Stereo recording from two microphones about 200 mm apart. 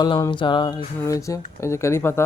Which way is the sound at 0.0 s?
20° left (ahead or behind).